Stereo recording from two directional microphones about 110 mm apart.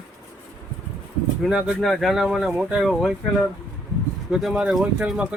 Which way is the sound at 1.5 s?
5° right (ahead or behind).